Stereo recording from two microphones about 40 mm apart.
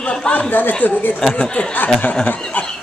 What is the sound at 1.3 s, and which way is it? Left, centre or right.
Speech, left.